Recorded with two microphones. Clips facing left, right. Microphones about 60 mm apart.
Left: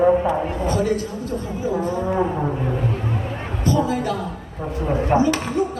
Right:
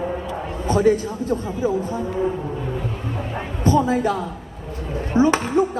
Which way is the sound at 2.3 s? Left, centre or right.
Left.